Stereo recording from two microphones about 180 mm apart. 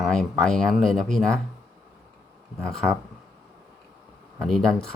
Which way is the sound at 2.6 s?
5° left (ahead or behind).